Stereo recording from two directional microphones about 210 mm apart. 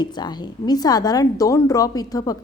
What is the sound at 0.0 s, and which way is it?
A woman's voice, 20° left (ahead or behind).